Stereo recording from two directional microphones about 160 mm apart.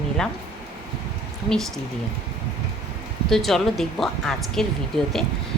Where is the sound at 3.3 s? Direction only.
Centre (ahead or behind).